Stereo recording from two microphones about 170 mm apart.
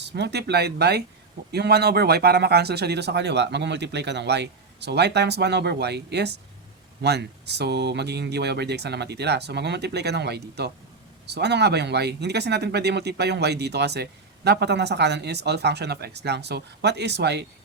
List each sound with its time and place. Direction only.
0.0 s speech: 85° right